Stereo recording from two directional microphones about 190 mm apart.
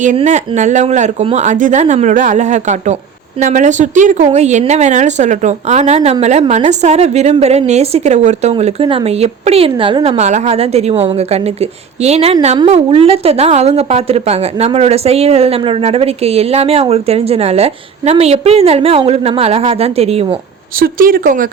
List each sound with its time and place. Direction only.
0.2 s a woman's voice: 40° right (ahead or behind)
20.7 s speech: 50° right (ahead or behind)